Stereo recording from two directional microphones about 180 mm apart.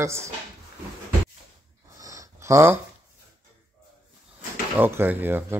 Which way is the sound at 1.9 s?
20° right (ahead or behind).